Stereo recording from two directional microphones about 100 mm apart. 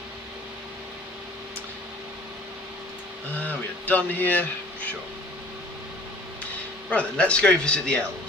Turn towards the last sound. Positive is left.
turn(degrees=10)  # may be behind; listen again after turning